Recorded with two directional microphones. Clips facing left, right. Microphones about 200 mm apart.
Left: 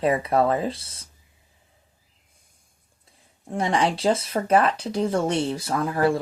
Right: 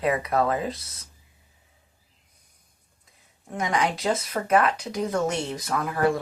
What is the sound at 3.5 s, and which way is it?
Speech, 30° left (ahead or behind).